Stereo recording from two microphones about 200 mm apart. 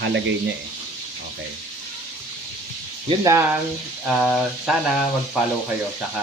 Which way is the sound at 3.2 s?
15° right (ahead or behind).